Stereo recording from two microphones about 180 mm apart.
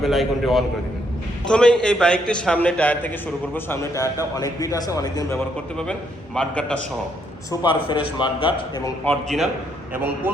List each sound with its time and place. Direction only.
0.0 s a man's voice: centre (ahead or behind); by 5.4 s 20° left (ahead or behind)
5.7 s a man's voice: 5° left (ahead or behind)
7.6 s a man's voice: 25° left (ahead or behind)
9.0 s a man's voice: centre (ahead or behind)
9.9 s speech: 10° right (ahead or behind)